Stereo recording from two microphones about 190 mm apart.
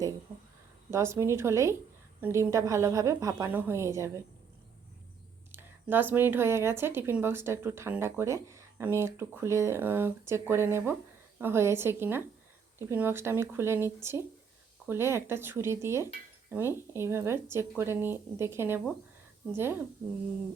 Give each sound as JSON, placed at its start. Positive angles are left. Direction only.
{"t": 0.9, "sound": "speech", "side_deg": -15}
{"t": 5.5, "sound": "speech", "side_deg": -10}